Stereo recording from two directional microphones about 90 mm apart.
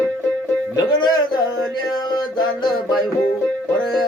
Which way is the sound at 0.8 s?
50° left (ahead or behind).